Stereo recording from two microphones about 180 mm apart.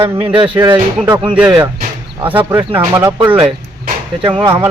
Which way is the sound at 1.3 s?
5° right (ahead or behind).